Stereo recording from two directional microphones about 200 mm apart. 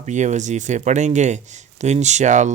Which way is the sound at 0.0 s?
35° right (ahead or behind).